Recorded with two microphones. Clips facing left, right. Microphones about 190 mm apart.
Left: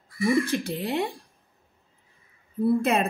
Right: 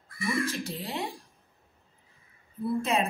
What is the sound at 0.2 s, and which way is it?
Speech, 60° left (ahead or behind).